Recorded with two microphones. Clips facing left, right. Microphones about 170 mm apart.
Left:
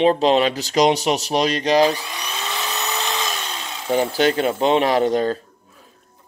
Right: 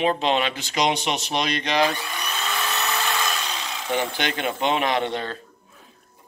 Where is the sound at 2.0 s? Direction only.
15° left (ahead or behind).